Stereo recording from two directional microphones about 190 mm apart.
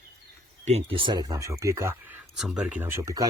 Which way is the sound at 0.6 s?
35° right (ahead or behind).